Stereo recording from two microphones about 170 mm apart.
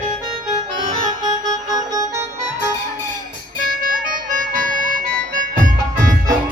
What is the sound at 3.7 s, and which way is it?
Harmonica, 55° right (ahead or behind).